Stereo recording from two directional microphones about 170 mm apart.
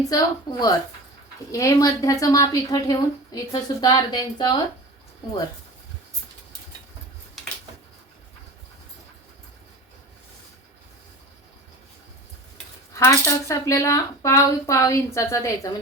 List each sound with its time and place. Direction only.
0.1 s a woman's voice: 20° left (ahead or behind)
7.4 s a sound: centre (ahead or behind)
12.9 s a woman's voice: 20° left (ahead or behind)